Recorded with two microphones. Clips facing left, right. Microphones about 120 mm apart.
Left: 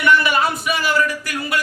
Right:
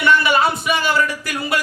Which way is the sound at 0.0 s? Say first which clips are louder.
Right 1 dB; 30° right (ahead or behind).